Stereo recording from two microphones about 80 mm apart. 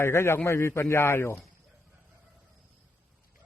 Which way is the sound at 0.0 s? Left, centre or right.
Left.